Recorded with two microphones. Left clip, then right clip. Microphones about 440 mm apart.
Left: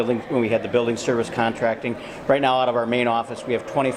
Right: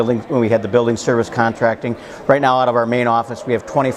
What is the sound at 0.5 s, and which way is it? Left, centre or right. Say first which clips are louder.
A man's voice: right 7 dB; right.